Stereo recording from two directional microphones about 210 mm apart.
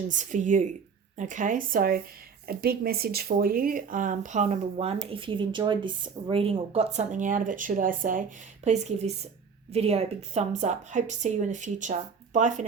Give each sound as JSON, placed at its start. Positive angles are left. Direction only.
{"t": 0.1, "sound": "speech", "side_deg": -35}